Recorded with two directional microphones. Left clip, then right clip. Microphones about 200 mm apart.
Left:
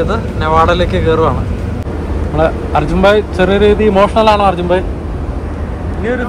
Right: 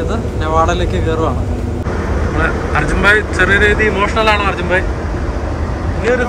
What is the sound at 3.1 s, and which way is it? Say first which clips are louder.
Speech: even; 15° left (ahead or behind).